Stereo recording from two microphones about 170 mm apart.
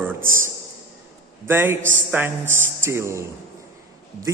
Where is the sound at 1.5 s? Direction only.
15° right (ahead or behind).